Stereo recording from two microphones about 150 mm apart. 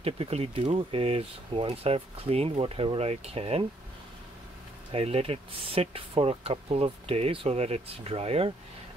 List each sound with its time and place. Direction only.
0.0 s speech: 40° right (ahead or behind)
4.9 s speech: 40° right (ahead or behind)